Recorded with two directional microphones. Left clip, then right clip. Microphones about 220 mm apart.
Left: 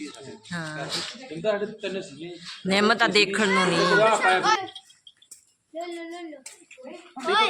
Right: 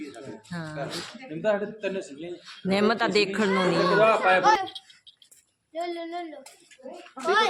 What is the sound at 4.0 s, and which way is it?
Speech, 55° right (ahead or behind).